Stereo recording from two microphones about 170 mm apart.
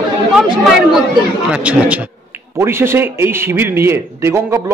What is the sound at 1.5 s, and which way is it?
A man's voice, 5° right (ahead or behind).